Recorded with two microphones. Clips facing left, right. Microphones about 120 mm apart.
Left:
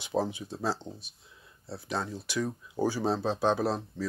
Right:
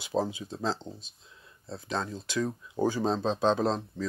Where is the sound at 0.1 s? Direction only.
15° right (ahead or behind).